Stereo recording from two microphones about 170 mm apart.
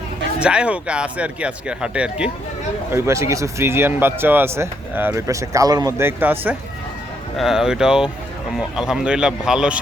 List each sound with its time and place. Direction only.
0.3 s a man's voice: 5° right (ahead or behind)
2.9 s a man's voice: 15° right (ahead or behind)